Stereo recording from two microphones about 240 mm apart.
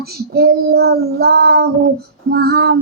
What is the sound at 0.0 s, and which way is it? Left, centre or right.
Child singing, right.